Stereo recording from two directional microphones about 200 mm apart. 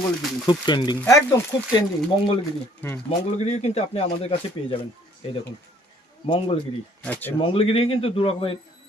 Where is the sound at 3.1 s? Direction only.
35° left (ahead or behind).